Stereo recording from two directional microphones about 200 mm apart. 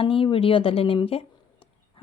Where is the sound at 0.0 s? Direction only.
25° left (ahead or behind).